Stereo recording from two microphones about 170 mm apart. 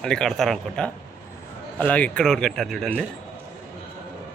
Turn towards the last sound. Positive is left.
turn(degrees=5)  # may be behind; listen again after turning